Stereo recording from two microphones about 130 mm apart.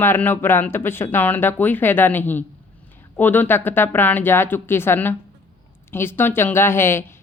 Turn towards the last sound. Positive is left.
turn(degrees=20)  # may be behind; listen again after turning